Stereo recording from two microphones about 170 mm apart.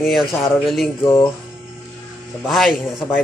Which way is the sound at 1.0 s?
25° left (ahead or behind).